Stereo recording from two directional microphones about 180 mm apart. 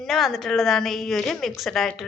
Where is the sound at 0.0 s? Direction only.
Centre (ahead or behind).